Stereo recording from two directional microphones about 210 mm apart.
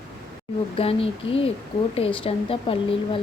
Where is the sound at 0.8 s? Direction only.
25° left (ahead or behind).